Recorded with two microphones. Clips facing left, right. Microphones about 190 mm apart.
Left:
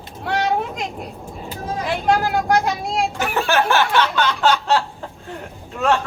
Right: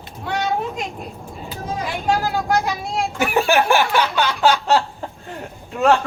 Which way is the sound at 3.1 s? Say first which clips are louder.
Right 5 dB; 15° right (ahead or behind).